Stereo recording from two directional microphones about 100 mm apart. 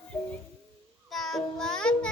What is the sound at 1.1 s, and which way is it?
Music, 5° left (ahead or behind).